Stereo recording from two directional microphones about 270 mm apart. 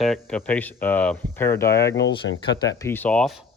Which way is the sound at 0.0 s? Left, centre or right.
Centre.